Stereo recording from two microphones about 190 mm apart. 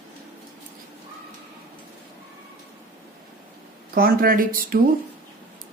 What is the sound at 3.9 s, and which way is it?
Speech, 50° right (ahead or behind).